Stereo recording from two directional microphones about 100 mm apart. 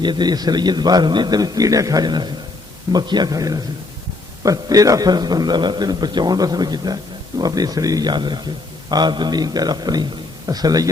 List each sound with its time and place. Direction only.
0.0 s a man's voice: 50° right (ahead or behind)